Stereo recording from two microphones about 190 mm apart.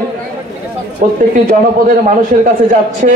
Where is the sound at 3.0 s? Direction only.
45° right (ahead or behind).